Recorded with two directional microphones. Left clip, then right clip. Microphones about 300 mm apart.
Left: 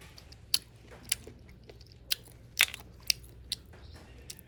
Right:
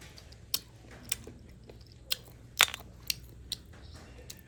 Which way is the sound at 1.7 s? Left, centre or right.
Centre.